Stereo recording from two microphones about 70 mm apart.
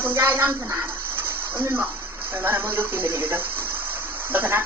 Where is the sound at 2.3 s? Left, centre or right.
Right.